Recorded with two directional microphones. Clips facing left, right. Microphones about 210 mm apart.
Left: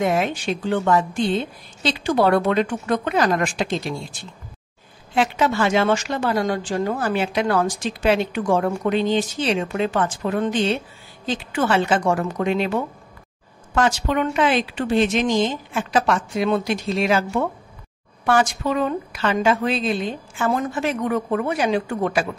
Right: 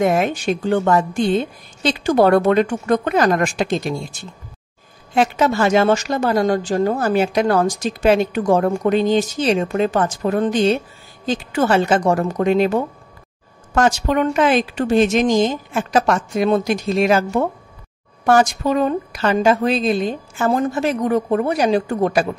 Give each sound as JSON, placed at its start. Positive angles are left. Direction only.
{"t": 0.0, "sound": "a woman's voice", "side_deg": -45}